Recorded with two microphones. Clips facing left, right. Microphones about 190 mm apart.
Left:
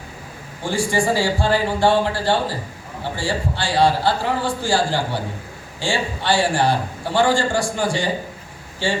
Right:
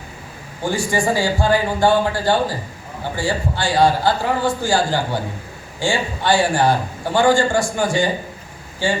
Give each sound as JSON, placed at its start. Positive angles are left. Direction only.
{"t": 0.7, "sound": "a man's voice", "side_deg": 30}